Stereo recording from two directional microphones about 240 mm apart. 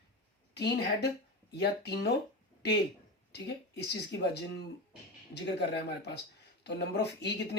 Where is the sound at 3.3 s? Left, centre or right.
Left.